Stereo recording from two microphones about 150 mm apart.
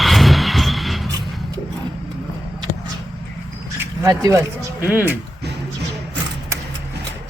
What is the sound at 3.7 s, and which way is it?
A man's voice, 20° right (ahead or behind).